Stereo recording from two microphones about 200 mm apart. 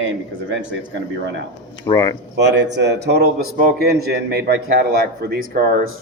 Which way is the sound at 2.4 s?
60° right (ahead or behind).